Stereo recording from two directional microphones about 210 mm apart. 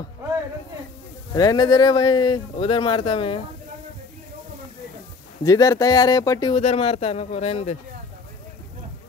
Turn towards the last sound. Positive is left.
turn(degrees=30)  # may be behind; listen again after turning